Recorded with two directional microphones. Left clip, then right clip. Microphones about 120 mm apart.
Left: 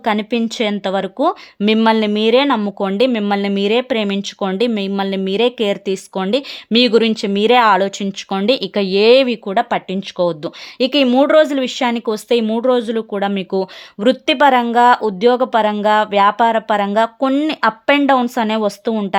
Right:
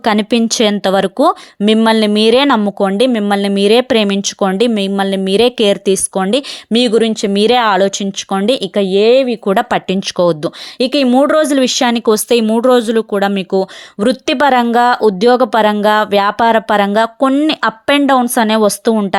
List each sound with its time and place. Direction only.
0.0 s speech: 50° right (ahead or behind)
1.6 s speech: 35° right (ahead or behind)
2.1 s speech: 50° right (ahead or behind)
2.6 s speech: 40° right (ahead or behind)
3.8 s speech: 50° right (ahead or behind)
6.7 s speech: 25° right (ahead or behind)
9.0 s speech: 10° right (ahead or behind)
9.5 s speech: 65° right (ahead or behind)
10.8 s speech: 30° right (ahead or behind)